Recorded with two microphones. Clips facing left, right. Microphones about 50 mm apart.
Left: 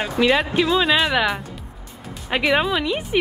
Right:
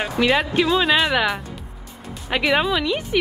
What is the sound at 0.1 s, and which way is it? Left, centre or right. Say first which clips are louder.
Speech: left 1 dB; centre.